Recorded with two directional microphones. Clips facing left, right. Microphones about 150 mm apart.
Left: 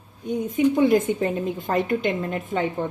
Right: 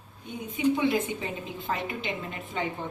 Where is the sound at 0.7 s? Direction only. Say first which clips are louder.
Left 8 dB; 45° left (ahead or behind).